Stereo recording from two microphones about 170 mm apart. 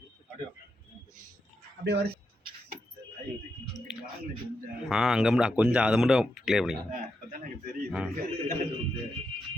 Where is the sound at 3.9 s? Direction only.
Centre (ahead or behind).